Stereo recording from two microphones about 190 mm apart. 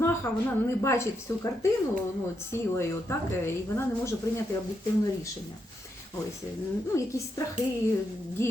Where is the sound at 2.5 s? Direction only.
15° left (ahead or behind).